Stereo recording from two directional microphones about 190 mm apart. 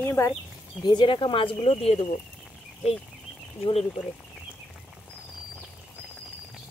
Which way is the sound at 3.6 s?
30° left (ahead or behind).